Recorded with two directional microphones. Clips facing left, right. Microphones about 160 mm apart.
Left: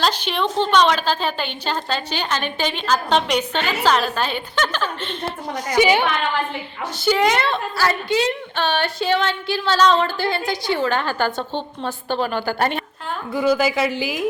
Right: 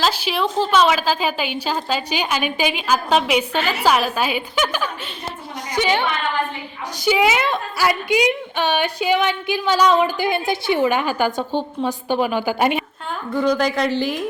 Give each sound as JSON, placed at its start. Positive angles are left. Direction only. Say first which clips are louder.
{"t": 0.0, "sound": "a woman's voice", "louder": "right 1 dB", "side_deg": -5}
{"t": 7.0, "sound": "a woman's voice", "louder": "even", "side_deg": -5}
{"t": 13.3, "sound": "speech", "louder": "even", "side_deg": 5}